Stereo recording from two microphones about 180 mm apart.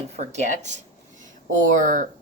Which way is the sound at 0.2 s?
40° right (ahead or behind).